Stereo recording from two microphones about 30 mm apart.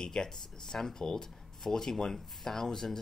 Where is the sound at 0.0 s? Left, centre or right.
Centre.